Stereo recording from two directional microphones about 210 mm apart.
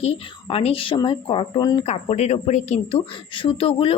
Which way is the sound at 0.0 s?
30° left (ahead or behind).